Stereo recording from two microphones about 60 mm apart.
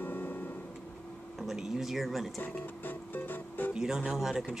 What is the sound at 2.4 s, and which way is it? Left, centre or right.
Music, left.